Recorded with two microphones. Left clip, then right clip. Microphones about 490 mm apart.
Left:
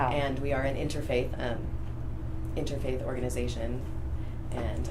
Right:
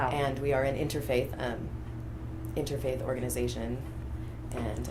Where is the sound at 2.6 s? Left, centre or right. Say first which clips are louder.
Right 1 dB; right.